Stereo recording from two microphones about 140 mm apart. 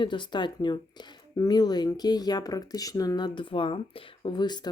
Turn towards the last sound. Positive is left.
turn(degrees=30)  # may be behind; listen again after turning